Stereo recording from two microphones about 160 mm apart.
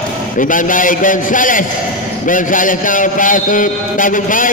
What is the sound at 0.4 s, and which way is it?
A man's voice, 55° left (ahead or behind).